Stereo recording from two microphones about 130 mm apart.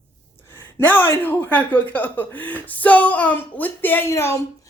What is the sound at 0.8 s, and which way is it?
Speech, 15° left (ahead or behind).